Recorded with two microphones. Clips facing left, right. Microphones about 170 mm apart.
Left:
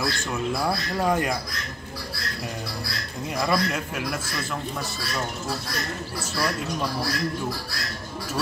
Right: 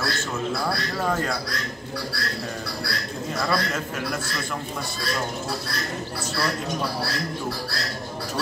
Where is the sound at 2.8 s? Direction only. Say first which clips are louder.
Right 3 dB; 15° left (ahead or behind).